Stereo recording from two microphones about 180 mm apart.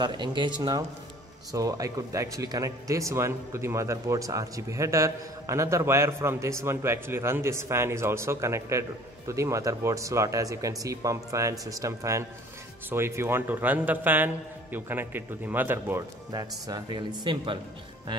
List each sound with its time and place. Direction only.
0.0 s speech: 25° right (ahead or behind)
16.3 s speech: 20° right (ahead or behind)